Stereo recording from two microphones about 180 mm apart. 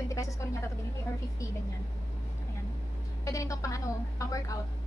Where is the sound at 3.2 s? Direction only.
20° left (ahead or behind).